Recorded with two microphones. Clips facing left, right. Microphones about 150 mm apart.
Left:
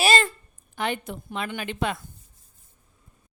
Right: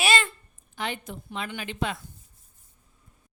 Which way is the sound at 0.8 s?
60° left (ahead or behind).